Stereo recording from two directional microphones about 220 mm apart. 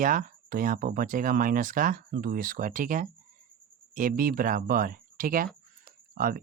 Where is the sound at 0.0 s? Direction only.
35° right (ahead or behind).